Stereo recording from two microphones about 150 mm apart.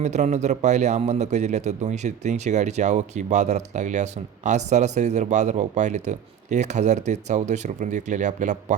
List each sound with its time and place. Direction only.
0.0 s a man's voice: 50° right (ahead or behind)